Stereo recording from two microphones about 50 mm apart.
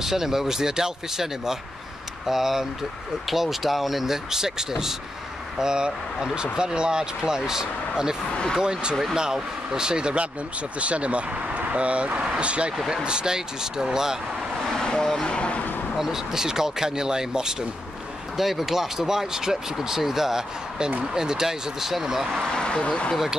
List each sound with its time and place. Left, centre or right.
0.0 s speech: centre
12.7 s speech: centre
14.8 s vehicle: centre
16.0 s speech: centre
22.3 s speech: centre
22.6 s speech: left